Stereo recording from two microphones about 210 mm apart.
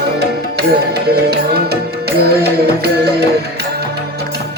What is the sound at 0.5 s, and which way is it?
Music, 50° right (ahead or behind).